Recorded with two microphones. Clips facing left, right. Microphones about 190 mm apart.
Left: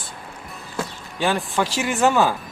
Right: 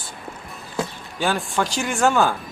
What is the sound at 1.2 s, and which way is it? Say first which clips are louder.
Speech: left 1 dB; centre (ahead or behind).